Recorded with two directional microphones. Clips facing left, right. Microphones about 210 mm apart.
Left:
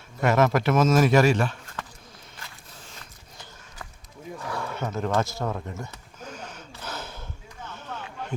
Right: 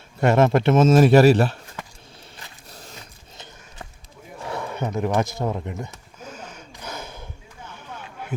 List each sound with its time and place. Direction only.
0.2 s a man's voice: 30° right (ahead or behind)
2.6 s biting: 40° right (ahead or behind)
4.4 s a sound: 20° right (ahead or behind)